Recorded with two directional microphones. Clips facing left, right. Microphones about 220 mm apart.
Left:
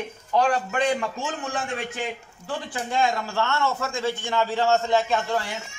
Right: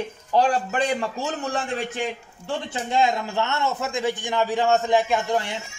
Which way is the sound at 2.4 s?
20° right (ahead or behind).